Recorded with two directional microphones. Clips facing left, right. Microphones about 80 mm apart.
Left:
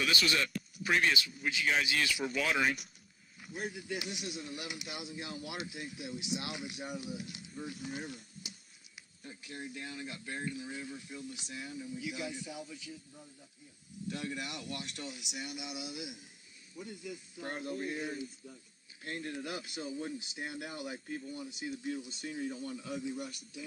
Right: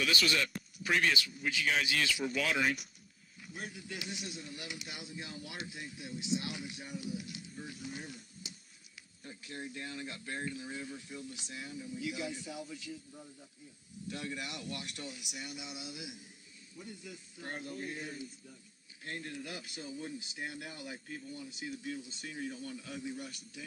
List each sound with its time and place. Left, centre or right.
0.8 s speech: left
7.0 s speech: left
9.4 s speech: left
14.0 s speech: left
19.2 s speech: left